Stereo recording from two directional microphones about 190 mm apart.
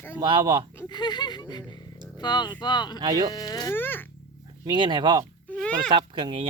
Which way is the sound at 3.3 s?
20° left (ahead or behind).